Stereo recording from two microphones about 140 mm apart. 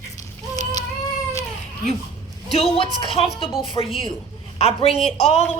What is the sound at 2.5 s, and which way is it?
A woman's voice, 45° left (ahead or behind).